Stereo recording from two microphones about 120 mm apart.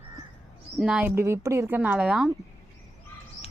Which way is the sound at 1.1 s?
20° right (ahead or behind).